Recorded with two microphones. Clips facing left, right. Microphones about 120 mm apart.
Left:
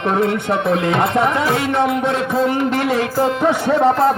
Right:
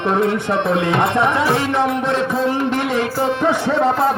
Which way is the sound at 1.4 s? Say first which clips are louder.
Right 1 dB; 30° right (ahead or behind).